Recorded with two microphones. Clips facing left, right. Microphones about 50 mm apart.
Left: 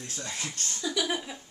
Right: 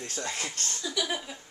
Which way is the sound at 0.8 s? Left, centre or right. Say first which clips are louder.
Left 2 dB; centre.